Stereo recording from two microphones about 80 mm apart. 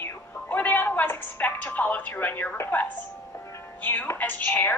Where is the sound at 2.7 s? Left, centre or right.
Left.